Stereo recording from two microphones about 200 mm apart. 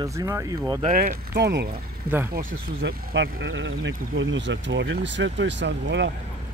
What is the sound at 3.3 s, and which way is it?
Speech, 75° right (ahead or behind).